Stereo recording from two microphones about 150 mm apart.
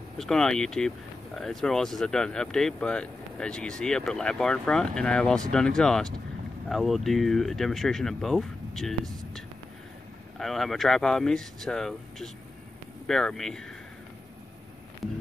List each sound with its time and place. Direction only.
0.2 s speech: 5° left (ahead or behind)
10.4 s speech: centre (ahead or behind)